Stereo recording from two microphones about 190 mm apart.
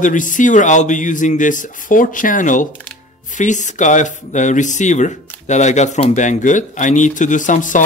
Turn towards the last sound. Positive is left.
turn(degrees=40)  # may be behind; listen again after turning